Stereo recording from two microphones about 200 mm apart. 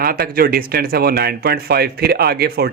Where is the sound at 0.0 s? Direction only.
50° right (ahead or behind).